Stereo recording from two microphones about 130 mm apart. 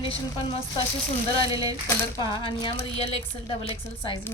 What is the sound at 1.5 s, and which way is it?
Speech, 30° right (ahead or behind).